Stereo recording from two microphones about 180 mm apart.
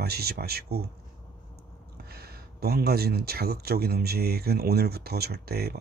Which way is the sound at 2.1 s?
60° right (ahead or behind).